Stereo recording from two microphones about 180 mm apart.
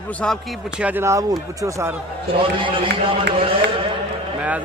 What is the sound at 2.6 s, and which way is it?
Speech, 30° right (ahead or behind).